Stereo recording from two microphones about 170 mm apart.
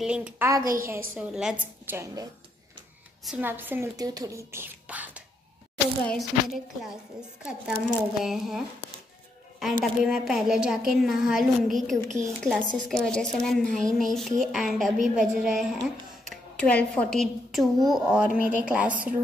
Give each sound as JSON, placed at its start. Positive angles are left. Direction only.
{"t": 0.0, "sound": "a woman's voice", "side_deg": -5}
{"t": 0.5, "sound": "a woman's voice", "side_deg": -20}
{"t": 1.1, "sound": "speech", "side_deg": -5}
{"t": 3.3, "sound": "a woman's voice", "side_deg": -10}